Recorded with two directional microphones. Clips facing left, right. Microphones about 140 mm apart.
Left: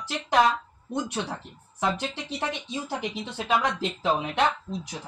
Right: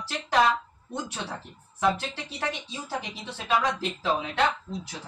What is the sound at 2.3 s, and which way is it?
Speech, 20° left (ahead or behind).